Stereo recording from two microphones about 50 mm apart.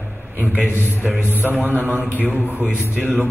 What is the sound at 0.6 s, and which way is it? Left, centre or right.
Speech, left.